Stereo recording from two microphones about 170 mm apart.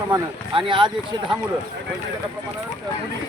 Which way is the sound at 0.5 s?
30° right (ahead or behind).